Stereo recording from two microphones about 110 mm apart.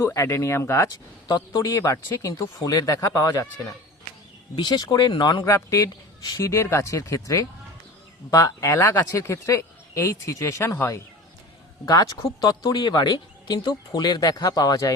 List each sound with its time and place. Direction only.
0.0 s speech: 25° left (ahead or behind)
1.3 s speech: 35° left (ahead or behind)
4.5 s speech: 45° left (ahead or behind)
5.5 s speech: 30° left (ahead or behind)